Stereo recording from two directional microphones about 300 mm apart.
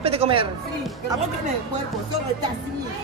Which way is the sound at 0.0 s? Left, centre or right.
Centre.